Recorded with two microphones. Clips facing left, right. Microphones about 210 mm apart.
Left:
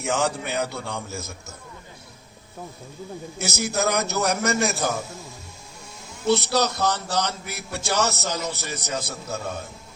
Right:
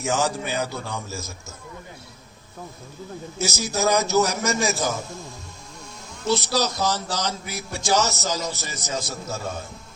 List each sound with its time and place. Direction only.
0.0 s speech: 60° left (ahead or behind)
3.3 s speech: 60° left (ahead or behind)
6.2 s speech: 60° left (ahead or behind)